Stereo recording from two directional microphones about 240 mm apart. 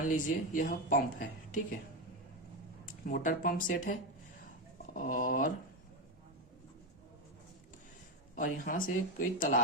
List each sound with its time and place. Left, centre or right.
0.1 s speech: left
3.1 s speech: left
4.9 s speech: left
8.4 s speech: left